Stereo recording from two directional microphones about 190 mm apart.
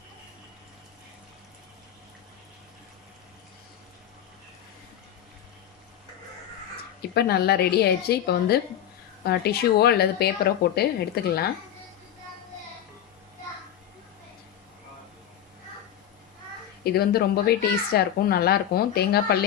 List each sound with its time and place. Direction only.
7.1 s a woman's voice: 55° left (ahead or behind)
16.8 s a woman's voice: 55° left (ahead or behind)